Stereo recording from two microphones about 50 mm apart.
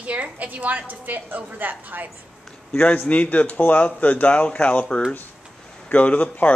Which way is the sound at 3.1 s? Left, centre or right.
Left.